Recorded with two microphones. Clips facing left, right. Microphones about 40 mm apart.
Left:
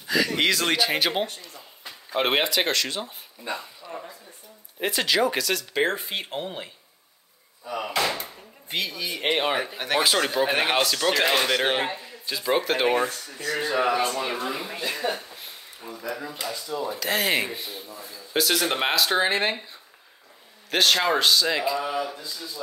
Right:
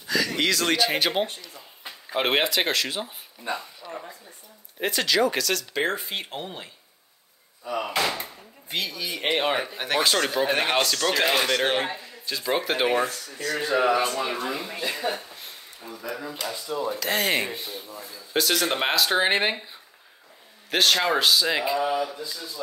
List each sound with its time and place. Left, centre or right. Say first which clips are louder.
0.0 s a sound: left 2 dB; centre
0.4 s speech: right 1 dB; centre
0.7 s speech: even; centre
1.5 s a sound: right 1 dB; centre
2.1 s speech: even; centre
7.6 s speech: even; centre
16.5 s speech: right 1 dB; centre
16.8 s speech: even; centre
19.4 s speech: even; centre
20.7 s speech: even; centre